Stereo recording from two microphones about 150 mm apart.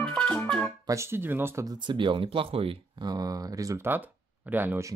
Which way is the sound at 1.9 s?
35° right (ahead or behind).